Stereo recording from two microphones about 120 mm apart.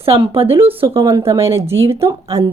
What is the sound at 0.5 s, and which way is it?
A woman's voice, 20° right (ahead or behind).